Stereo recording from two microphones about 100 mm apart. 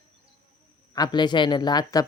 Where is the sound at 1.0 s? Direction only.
45° left (ahead or behind).